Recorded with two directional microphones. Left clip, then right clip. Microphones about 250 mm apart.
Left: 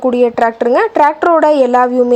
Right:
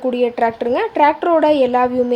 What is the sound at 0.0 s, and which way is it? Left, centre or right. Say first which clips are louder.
Speech: left 5 dB; centre.